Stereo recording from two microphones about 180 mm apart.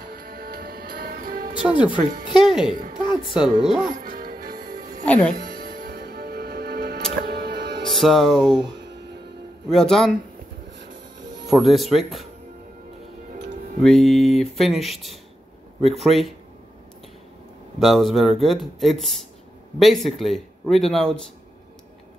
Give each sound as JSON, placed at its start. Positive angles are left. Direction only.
{"t": 0.1, "sound": "music", "side_deg": -55}
{"t": 1.6, "sound": "speech", "side_deg": -5}
{"t": 2.4, "sound": "music", "side_deg": -5}
{"t": 2.7, "sound": "a woman's voice", "side_deg": -45}
{"t": 3.3, "sound": "a man's voice", "side_deg": 0}
{"t": 4.0, "sound": "music", "side_deg": -50}
{"t": 5.0, "sound": "speech", "side_deg": 10}
{"t": 5.4, "sound": "music", "side_deg": -60}
{"t": 7.9, "sound": "a man's voice", "side_deg": 0}
{"t": 8.7, "sound": "music", "side_deg": -75}
{"t": 9.7, "sound": "a man's voice", "side_deg": 5}
{"t": 11.5, "sound": "a man's voice", "side_deg": 0}
{"t": 13.8, "sound": "a man's voice", "side_deg": 0}
{"t": 17.7, "sound": "a man's voice", "side_deg": 0}